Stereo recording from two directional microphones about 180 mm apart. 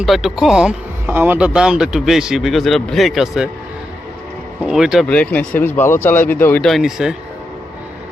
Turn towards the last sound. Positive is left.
turn(degrees=-5)  # may be behind; listen again after turning